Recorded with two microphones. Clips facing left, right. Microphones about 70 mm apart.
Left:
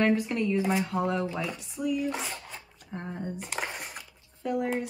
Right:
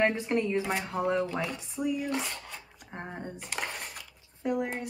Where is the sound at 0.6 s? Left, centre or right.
Centre.